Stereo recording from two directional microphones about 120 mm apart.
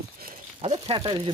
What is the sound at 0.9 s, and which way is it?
Speech, 45° right (ahead or behind).